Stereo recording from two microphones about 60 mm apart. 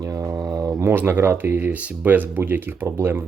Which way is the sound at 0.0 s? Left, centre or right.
Right.